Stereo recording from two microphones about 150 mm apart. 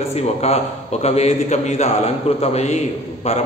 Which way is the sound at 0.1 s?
45° left (ahead or behind).